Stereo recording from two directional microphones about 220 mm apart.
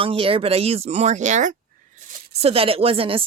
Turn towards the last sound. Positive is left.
turn(degrees=-25)  # may be behind; listen again after turning